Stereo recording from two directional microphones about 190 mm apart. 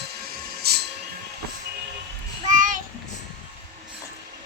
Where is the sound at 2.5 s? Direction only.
45° right (ahead or behind).